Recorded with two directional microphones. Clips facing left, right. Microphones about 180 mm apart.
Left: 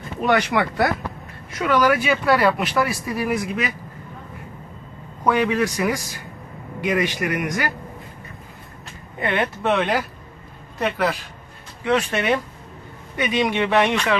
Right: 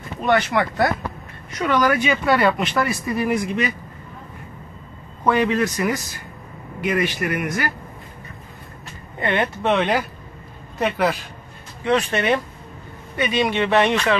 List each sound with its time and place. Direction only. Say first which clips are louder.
0.3 s speech: right 1 dB; 15° left (ahead or behind)
1.6 s speech: even; 5° left (ahead or behind)
5.2 s speech: right 1 dB; 10° left (ahead or behind)
9.2 s speech: right 1 dB; 5° left (ahead or behind)
11.8 s speech: right 1 dB; 10° left (ahead or behind)